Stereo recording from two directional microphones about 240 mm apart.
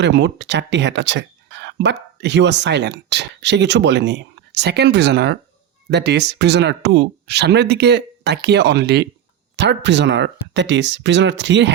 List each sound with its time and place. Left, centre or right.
0.0 s speech: right